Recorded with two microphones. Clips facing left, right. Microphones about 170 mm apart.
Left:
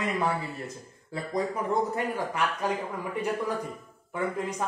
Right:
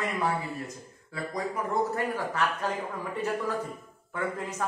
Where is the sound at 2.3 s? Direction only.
15° left (ahead or behind).